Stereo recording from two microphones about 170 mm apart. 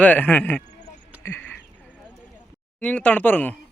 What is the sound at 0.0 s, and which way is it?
Speech, 10° left (ahead or behind).